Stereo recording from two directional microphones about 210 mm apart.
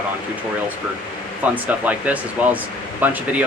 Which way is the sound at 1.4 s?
5° right (ahead or behind).